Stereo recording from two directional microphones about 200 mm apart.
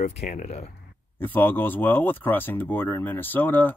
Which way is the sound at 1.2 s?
10° left (ahead or behind).